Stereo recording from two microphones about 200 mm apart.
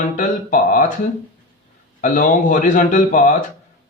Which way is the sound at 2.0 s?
40° left (ahead or behind).